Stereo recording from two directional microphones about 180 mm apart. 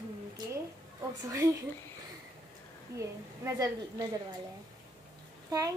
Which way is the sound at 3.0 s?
15° right (ahead or behind).